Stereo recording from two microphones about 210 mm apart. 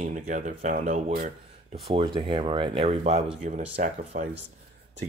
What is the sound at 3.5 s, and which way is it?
Speech, 40° right (ahead or behind).